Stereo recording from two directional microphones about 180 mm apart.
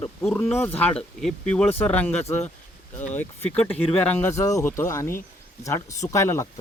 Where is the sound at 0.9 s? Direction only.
5° left (ahead or behind).